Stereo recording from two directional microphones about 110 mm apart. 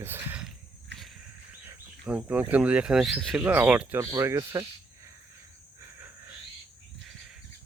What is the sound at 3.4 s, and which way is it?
Speech, 15° right (ahead or behind).